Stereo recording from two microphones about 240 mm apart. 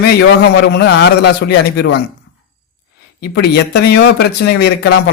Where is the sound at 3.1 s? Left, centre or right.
Left.